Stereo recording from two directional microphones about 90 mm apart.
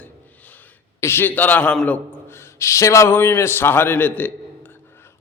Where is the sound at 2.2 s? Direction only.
30° left (ahead or behind).